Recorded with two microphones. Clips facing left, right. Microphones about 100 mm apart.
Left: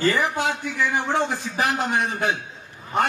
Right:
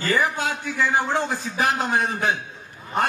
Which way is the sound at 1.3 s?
35° right (ahead or behind).